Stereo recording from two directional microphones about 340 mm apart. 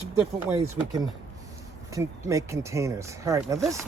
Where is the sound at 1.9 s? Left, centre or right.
Centre.